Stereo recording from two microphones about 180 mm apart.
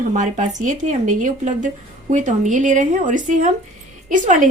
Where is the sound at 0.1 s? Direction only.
40° right (ahead or behind).